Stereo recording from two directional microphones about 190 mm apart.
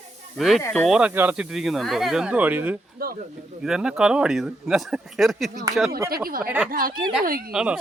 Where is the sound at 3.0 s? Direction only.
50° right (ahead or behind).